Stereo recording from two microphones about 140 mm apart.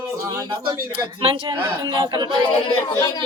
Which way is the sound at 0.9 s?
40° right (ahead or behind).